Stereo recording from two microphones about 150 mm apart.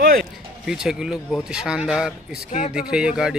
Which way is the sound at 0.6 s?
5° right (ahead or behind).